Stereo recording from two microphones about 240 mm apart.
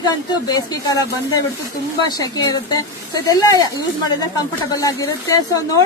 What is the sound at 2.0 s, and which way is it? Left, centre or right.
A woman's voice, centre.